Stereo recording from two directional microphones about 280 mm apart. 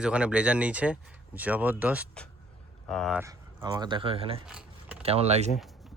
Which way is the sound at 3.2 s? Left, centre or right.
Centre.